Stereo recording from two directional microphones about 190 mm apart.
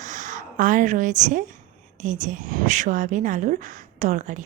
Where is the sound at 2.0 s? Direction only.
40° right (ahead or behind).